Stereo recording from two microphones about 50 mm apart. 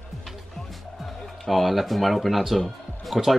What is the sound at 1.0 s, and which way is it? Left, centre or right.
Speech, centre.